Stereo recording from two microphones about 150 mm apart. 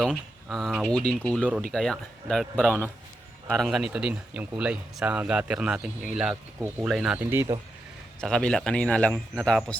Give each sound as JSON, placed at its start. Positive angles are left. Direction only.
{"t": 0.1, "sound": "a man's voice", "side_deg": 0}
{"t": 7.3, "sound": "speech", "side_deg": -15}
{"t": 8.2, "sound": "a man's voice", "side_deg": 5}